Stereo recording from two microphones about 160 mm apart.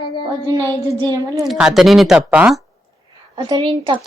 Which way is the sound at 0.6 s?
20° right (ahead or behind).